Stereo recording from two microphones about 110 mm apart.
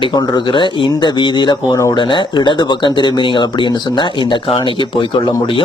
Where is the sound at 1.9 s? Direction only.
45° left (ahead or behind).